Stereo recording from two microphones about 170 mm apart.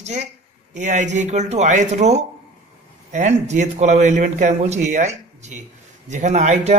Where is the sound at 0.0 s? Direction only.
40° right (ahead or behind).